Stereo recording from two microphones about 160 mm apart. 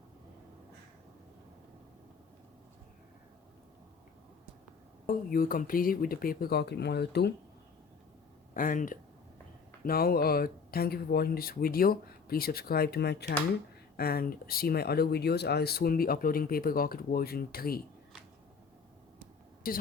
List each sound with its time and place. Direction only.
5.0 s speech: 60° left (ahead or behind); by 7.3 s 90° left
8.5 s speech: 60° left (ahead or behind)
9.8 s speech: 70° left (ahead or behind); by 13.3 s 90° left
13.9 s speech: 75° left (ahead or behind)
19.6 s speech: 65° left (ahead or behind)